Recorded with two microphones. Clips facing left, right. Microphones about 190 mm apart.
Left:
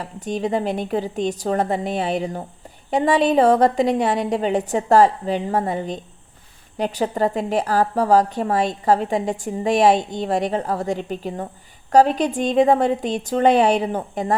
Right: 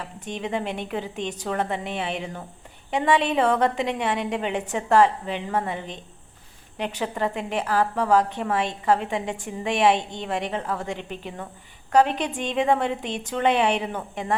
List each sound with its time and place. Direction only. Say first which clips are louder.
0.0 s a woman's voice: left 7 dB; 35° left (ahead or behind)